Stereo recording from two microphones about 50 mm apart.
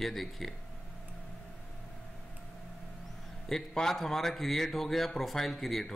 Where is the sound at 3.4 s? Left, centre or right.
Centre.